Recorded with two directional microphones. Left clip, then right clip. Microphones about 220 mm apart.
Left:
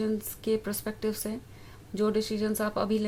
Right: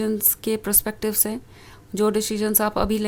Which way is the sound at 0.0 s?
35° right (ahead or behind).